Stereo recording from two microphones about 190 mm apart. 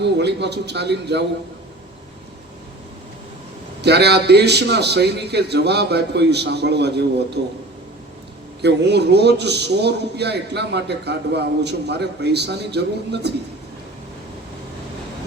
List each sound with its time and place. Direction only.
0.0 s a man's voice: 65° right (ahead or behind)
3.8 s a man's voice: 60° right (ahead or behind)
8.6 s a man's voice: 60° right (ahead or behind)